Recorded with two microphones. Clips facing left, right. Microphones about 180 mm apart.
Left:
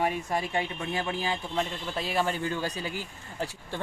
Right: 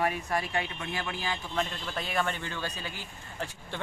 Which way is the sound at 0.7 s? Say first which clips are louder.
Left 4 dB; 30° left (ahead or behind).